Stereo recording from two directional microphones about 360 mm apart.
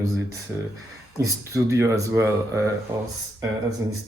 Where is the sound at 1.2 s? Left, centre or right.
Centre.